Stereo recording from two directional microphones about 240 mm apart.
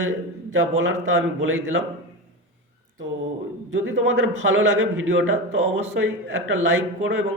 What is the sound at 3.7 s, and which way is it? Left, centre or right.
Speech, right.